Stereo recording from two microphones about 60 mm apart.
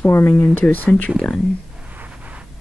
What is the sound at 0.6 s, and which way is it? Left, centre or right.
Speech, left.